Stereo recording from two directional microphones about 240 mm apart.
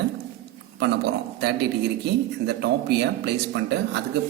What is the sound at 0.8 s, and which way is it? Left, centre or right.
Speech, right.